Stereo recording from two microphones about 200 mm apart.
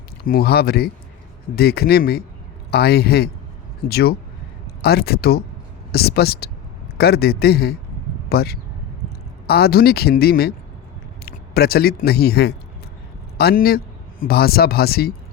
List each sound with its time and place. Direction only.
0.3 s speech: 50° left (ahead or behind)